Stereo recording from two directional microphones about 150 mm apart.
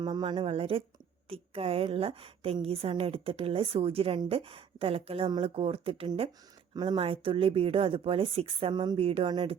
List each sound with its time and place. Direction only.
0.0 s a woman's voice: 35° right (ahead or behind)